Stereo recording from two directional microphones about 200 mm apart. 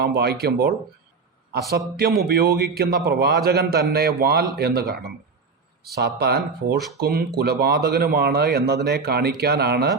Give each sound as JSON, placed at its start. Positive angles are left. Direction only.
{"t": 0.0, "sound": "a man's voice", "side_deg": -55}
{"t": 2.0, "sound": "a man's voice", "side_deg": -50}